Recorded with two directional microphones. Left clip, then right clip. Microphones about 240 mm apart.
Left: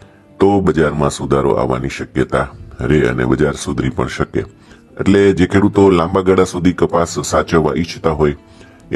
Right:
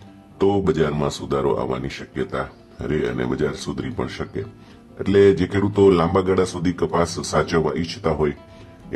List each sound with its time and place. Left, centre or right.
0.4 s speech: left